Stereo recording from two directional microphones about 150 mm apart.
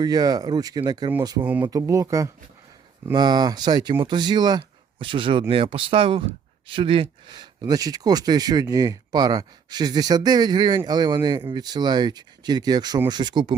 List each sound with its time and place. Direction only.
0.0 s speech: 25° right (ahead or behind)
1.5 s speech: 10° right (ahead or behind)
1.7 s speech: 20° right (ahead or behind)